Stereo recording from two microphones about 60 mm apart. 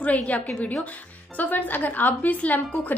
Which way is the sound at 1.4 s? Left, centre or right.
Left.